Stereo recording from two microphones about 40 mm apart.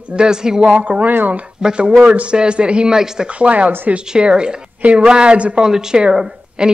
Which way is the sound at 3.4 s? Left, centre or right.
Right.